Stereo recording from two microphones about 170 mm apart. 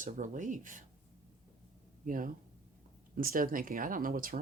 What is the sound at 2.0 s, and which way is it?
Speech, 50° right (ahead or behind).